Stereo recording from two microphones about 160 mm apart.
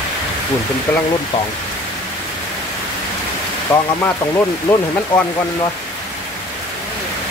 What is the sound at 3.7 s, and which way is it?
Speech, 15° left (ahead or behind).